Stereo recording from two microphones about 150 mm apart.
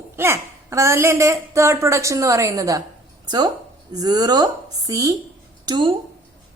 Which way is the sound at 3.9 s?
25° right (ahead or behind).